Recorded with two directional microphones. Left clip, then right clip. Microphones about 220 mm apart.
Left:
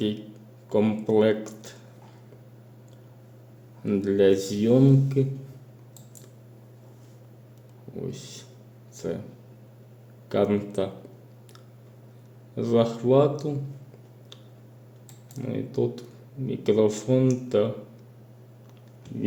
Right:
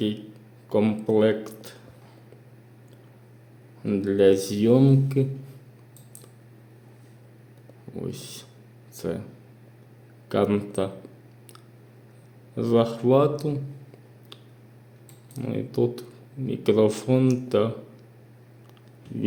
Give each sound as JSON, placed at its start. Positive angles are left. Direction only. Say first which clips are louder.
{"t": 0.7, "sound": "speech", "louder": "right 1 dB", "side_deg": -10}
{"t": 3.8, "sound": "speech", "louder": "right 1 dB", "side_deg": -10}
{"t": 7.9, "sound": "speech", "louder": "right 1 dB", "side_deg": -15}
{"t": 10.2, "sound": "speech", "louder": "even", "side_deg": -15}
{"t": 12.5, "sound": "speech", "louder": "right 1 dB", "side_deg": -15}
{"t": 15.4, "sound": "speech", "louder": "right 2 dB", "side_deg": -15}